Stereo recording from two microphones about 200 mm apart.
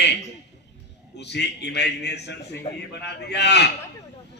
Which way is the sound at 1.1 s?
60° left (ahead or behind).